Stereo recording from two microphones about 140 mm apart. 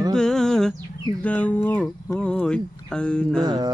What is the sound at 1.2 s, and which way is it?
Speech, 10° left (ahead or behind).